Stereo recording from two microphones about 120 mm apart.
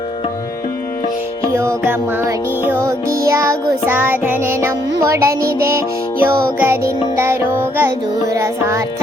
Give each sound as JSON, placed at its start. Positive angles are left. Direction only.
{"t": 1.5, "sound": "music", "side_deg": -20}